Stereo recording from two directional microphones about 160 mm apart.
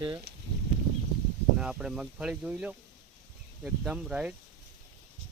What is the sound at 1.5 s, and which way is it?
Speech, 5° right (ahead or behind).